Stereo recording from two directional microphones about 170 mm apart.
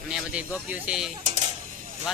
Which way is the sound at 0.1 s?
5° right (ahead or behind).